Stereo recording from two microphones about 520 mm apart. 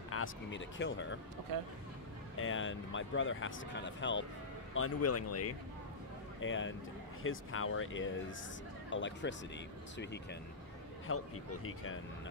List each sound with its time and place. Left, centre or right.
0.1 s speech: left
1.5 s speech: right
2.3 s speech: left
11.1 s speech: left